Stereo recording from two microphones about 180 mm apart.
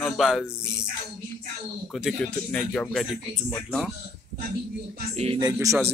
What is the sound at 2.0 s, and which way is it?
Speech, centre (ahead or behind).